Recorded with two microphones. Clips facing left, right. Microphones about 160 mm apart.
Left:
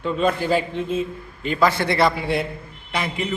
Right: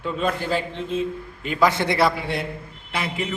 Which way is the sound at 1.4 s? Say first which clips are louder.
Left 2 dB; 5° right (ahead or behind).